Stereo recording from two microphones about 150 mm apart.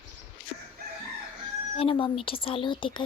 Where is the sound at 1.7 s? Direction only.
35° left (ahead or behind).